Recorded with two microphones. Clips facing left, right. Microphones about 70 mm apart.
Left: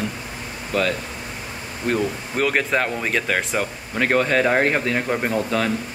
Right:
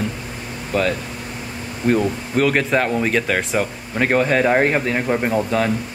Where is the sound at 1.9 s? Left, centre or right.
Centre.